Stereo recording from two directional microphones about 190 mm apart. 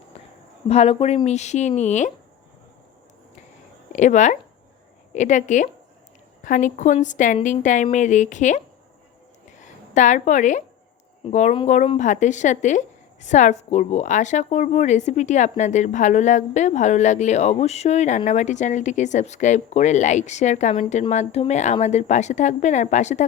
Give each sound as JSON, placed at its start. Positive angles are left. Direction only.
{"t": 0.7, "sound": "a woman's voice", "side_deg": 30}
{"t": 3.9, "sound": "a woman's voice", "side_deg": 40}